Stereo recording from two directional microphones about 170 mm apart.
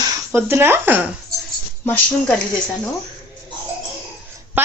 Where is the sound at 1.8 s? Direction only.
10° left (ahead or behind).